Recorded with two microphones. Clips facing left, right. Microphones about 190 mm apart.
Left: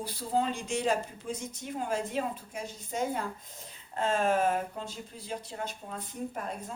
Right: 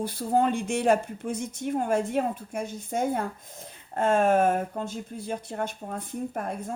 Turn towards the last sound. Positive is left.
turn(degrees=-55)  # may be behind; listen again after turning